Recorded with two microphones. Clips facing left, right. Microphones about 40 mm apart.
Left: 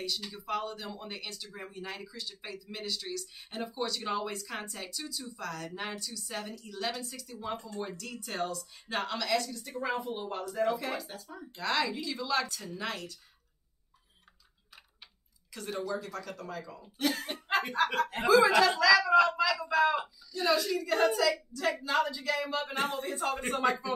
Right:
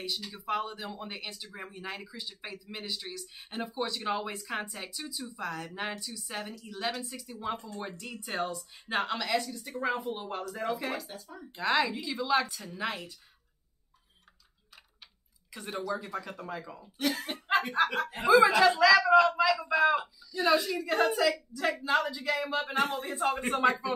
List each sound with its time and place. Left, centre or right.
0.3 s speech: centre
11.0 s speech: centre
11.5 s speech: centre
15.5 s speech: centre
17.0 s speech: centre
18.2 s speech: centre
18.9 s a sound: centre
20.3 s speech: centre
22.8 s speech: centre